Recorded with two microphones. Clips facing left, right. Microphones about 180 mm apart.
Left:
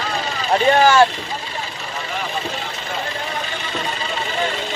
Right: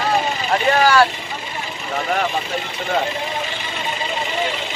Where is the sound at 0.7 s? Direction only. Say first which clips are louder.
Left 1 dB; 25° left (ahead or behind).